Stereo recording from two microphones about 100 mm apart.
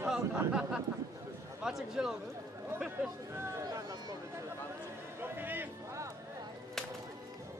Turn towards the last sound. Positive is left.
turn(degrees=-20)  # may be behind; listen again after turning